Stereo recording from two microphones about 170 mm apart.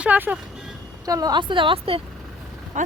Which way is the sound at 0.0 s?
10° right (ahead or behind).